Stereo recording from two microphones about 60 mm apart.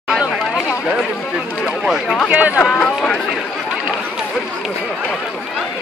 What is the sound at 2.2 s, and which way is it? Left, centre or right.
Speech, right.